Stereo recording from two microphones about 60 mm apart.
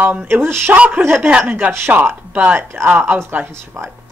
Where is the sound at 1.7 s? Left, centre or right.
Right.